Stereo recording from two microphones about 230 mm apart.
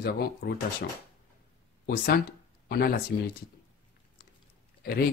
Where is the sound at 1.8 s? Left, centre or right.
Left.